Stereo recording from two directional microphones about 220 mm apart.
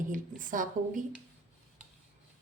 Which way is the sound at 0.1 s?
35° right (ahead or behind).